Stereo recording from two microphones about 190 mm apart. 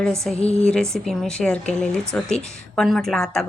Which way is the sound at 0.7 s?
Centre (ahead or behind).